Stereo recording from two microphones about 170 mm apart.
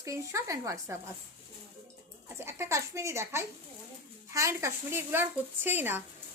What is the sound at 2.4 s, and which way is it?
Speech, 15° right (ahead or behind).